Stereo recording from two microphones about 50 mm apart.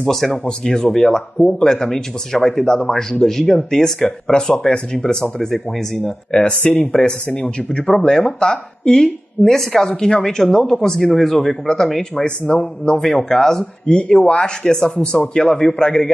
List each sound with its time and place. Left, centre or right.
0.0 s speech: centre